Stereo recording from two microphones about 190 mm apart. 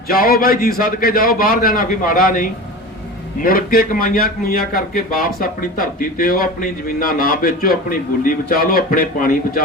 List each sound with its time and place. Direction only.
0.1 s a man's voice: 50° left (ahead or behind)